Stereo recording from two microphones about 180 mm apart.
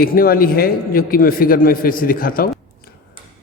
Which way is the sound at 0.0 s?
55° left (ahead or behind).